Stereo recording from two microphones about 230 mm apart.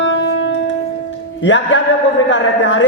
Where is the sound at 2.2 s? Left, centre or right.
Left.